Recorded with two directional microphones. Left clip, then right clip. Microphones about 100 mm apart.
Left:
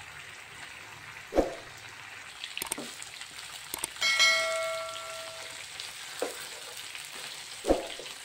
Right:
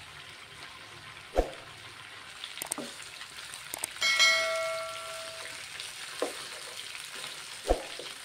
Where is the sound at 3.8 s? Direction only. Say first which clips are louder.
Even; centre (ahead or behind).